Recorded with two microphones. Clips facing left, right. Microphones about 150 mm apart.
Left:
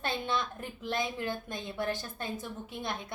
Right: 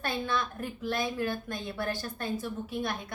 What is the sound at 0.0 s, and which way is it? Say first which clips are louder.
A woman's voice: right 1 dB; 20° left (ahead or behind).